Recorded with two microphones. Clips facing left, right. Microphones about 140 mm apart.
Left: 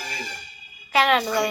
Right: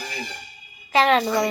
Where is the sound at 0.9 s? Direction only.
35° right (ahead or behind).